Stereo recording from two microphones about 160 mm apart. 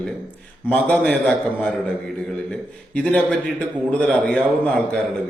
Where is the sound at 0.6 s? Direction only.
5° left (ahead or behind).